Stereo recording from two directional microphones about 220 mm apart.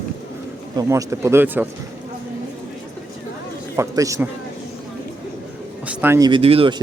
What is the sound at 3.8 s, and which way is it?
Speech, 15° right (ahead or behind).